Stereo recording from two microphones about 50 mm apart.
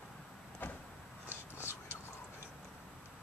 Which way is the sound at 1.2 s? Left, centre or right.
Left.